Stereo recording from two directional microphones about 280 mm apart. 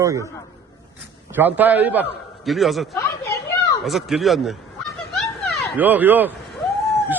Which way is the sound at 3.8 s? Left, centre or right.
Centre.